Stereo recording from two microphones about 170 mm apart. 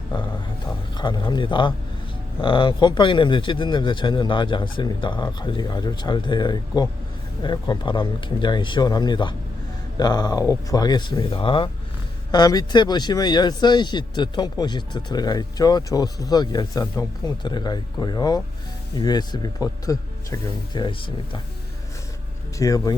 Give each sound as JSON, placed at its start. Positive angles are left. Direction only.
{"t": 0.9, "sound": "speech", "side_deg": 25}
{"t": 22.5, "sound": "speech", "side_deg": 20}